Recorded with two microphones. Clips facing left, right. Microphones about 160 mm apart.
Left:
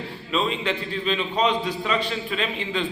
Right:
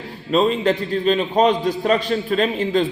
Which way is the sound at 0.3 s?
40° right (ahead or behind).